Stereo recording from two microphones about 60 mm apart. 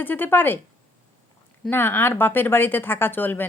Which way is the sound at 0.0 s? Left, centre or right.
Left.